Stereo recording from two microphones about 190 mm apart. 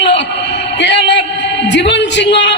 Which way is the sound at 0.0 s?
65° left (ahead or behind).